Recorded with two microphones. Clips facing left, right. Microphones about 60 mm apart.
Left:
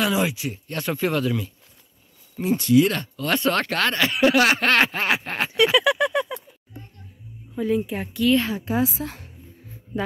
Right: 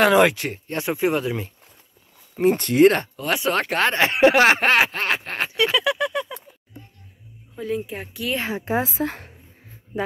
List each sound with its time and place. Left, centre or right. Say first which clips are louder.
0.0 s speech: right 7 dB; right
0.7 s speech: right 3 dB; centre
2.3 s speech: even; right
3.2 s speech: even; centre
3.8 s speech: right 4 dB; right
4.6 s speech: right 1 dB; centre
4.9 s a sound: left 1 dB; centre
5.6 s a sound: left 3 dB; centre
7.5 s speech: left 4 dB; centre
8.3 s a woman's voice: left 3 dB; right